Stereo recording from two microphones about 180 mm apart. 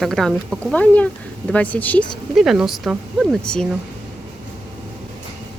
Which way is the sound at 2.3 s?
Centre (ahead or behind).